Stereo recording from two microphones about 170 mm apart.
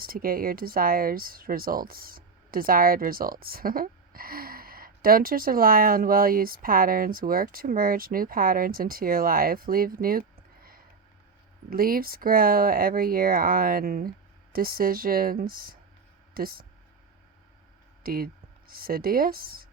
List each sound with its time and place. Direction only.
0.0 s speech: 60° right (ahead or behind)
18.0 s speech: 60° right (ahead or behind)